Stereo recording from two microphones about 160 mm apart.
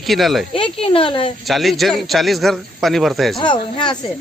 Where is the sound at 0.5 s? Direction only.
35° left (ahead or behind).